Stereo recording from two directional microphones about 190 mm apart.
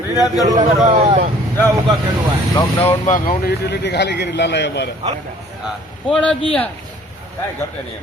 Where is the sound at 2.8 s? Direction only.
40° left (ahead or behind); by 4.9 s 65° left (ahead or behind).